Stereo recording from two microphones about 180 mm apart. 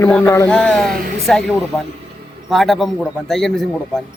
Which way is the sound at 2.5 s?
Centre (ahead or behind).